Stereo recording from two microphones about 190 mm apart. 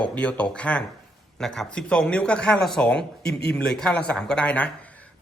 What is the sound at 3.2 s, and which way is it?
Speech, 60° left (ahead or behind).